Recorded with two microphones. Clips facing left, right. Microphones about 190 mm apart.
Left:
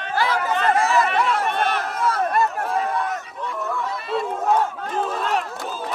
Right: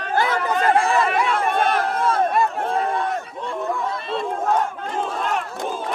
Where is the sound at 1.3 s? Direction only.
55° right (ahead or behind).